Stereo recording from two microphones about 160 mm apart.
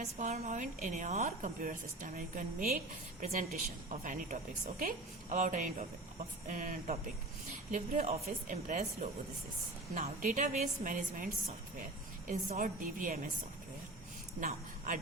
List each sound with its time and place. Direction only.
0.0 s a woman's voice: 45° right (ahead or behind)
7.7 s a woman's voice: 45° right (ahead or behind)